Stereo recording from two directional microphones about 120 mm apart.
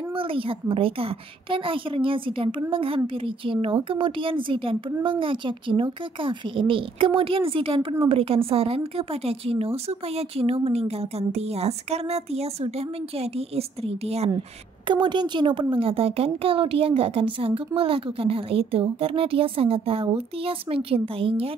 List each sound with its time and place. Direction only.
0.1 s a woman's voice: 50° right (ahead or behind)
14.9 s speech: 40° right (ahead or behind)